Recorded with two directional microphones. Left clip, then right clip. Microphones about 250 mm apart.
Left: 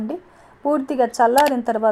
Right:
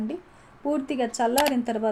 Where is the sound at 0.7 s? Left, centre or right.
Centre.